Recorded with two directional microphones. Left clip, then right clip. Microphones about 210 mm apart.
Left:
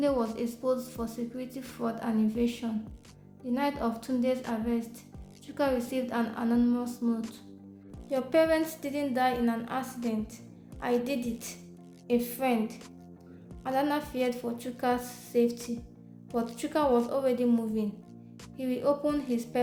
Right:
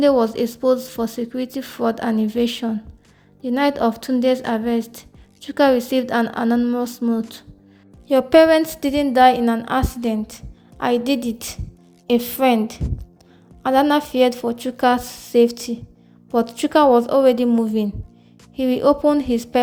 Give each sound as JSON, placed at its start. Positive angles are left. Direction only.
{"t": 0.0, "sound": "a woman's voice", "side_deg": -45}